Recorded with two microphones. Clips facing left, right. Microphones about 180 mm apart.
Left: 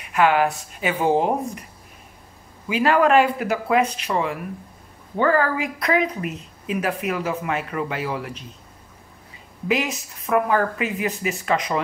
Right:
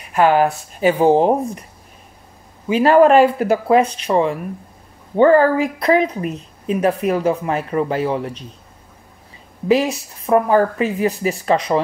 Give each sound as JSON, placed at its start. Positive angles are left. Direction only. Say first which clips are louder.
{"t": 0.1, "sound": "speech", "louder": "right 4 dB", "side_deg": -35}
{"t": 2.7, "sound": "speech", "louder": "right 6 dB", "side_deg": -35}
{"t": 9.7, "sound": "speech", "louder": "right 7 dB", "side_deg": -30}